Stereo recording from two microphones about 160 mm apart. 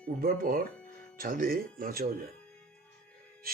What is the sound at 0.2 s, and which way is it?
Speech, 65° right (ahead or behind).